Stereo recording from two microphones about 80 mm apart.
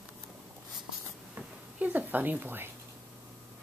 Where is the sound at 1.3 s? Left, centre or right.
Centre.